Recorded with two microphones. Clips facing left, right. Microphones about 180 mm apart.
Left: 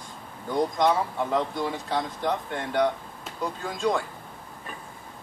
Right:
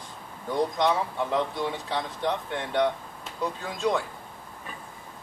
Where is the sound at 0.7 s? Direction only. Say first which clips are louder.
Left 2 dB; centre (ahead or behind).